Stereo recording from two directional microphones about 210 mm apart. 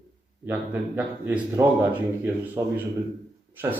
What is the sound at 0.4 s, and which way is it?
Speech, 10° right (ahead or behind).